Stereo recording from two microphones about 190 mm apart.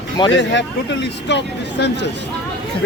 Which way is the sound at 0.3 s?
70° left (ahead or behind).